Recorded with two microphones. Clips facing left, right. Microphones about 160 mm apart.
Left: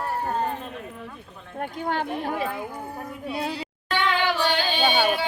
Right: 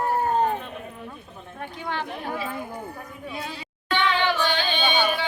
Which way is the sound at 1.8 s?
45° left (ahead or behind).